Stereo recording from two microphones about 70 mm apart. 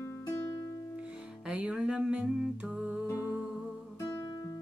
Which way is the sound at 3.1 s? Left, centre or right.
Left.